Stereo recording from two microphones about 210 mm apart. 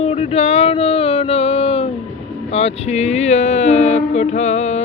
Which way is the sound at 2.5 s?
30° left (ahead or behind).